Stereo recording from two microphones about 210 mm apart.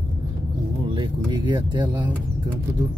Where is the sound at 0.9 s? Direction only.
20° right (ahead or behind).